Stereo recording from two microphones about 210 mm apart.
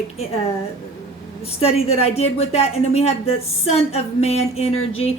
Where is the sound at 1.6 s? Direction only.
30° left (ahead or behind).